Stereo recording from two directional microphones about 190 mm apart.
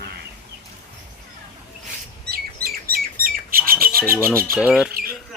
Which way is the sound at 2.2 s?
55° right (ahead or behind).